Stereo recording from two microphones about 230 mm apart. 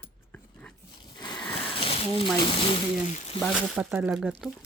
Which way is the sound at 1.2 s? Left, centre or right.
Centre.